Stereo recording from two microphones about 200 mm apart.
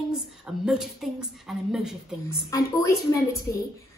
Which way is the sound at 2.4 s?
15° left (ahead or behind).